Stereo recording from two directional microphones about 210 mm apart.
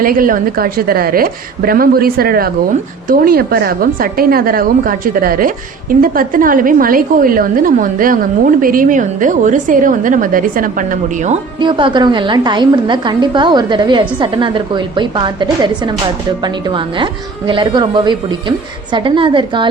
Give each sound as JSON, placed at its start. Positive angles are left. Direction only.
{"t": 0.0, "sound": "a woman's voice", "side_deg": -40}
{"t": 11.6, "sound": "a woman's voice", "side_deg": -20}